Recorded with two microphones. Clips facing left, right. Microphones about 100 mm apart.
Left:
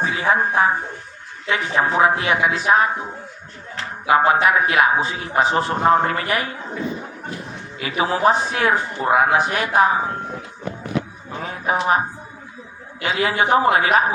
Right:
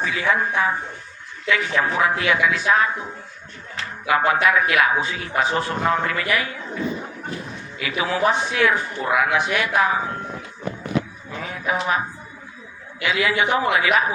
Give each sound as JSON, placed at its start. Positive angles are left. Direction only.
{"t": 0.0, "sound": "a man's voice", "side_deg": 30}
{"t": 4.0, "sound": "a man's voice", "side_deg": 30}
{"t": 7.8, "sound": "a man's voice", "side_deg": 35}
{"t": 11.3, "sound": "a man's voice", "side_deg": 35}